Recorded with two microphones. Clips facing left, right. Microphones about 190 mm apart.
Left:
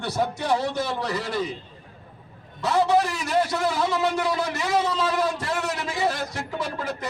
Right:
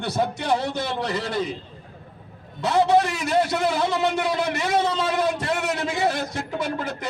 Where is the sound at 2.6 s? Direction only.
20° right (ahead or behind).